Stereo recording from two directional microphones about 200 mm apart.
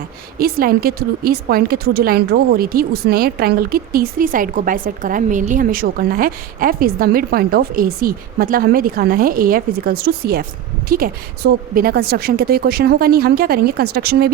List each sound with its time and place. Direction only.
0.3 s speech: 45° right (ahead or behind)